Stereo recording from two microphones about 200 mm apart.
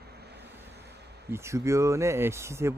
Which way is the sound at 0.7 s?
55° right (ahead or behind).